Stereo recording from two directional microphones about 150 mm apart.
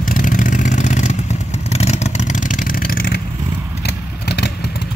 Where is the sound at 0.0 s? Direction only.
65° left (ahead or behind).